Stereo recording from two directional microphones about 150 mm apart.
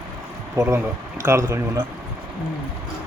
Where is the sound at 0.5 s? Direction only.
20° right (ahead or behind).